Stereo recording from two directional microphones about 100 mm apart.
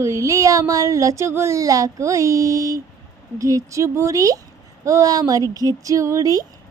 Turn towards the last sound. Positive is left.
turn(degrees=-35)  # may be behind; listen again after turning